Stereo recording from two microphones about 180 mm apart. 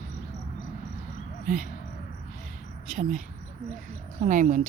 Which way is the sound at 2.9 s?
40° right (ahead or behind).